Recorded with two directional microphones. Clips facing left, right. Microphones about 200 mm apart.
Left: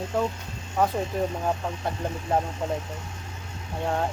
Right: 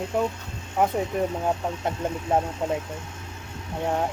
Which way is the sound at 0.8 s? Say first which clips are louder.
Right 1 dB; 20° right (ahead or behind).